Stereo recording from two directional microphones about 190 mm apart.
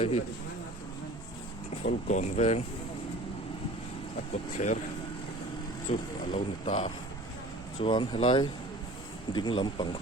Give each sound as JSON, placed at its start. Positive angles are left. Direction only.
{"t": 1.8, "sound": "speech", "side_deg": 40}
{"t": 4.5, "sound": "speech", "side_deg": 40}
{"t": 5.9, "sound": "speech", "side_deg": 35}